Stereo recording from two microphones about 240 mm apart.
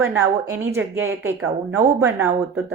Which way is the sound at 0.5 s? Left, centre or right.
Centre.